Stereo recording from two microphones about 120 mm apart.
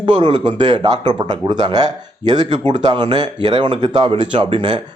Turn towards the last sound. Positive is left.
turn(degrees=-40)  # may be behind; listen again after turning